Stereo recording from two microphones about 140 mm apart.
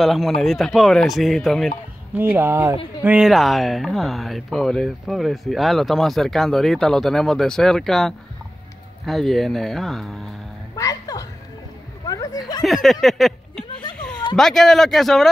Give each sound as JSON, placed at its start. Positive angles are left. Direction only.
{"t": 0.0, "sound": "speech", "side_deg": 0}
{"t": 2.1, "sound": "speech", "side_deg": -15}
{"t": 3.0, "sound": "speech", "side_deg": -10}
{"t": 10.8, "sound": "music", "side_deg": 25}
{"t": 12.1, "sound": "a sound", "side_deg": 25}
{"t": 12.6, "sound": "speech", "side_deg": 0}
{"t": 13.9, "sound": "a sound", "side_deg": 5}
{"t": 14.3, "sound": "speech", "side_deg": 5}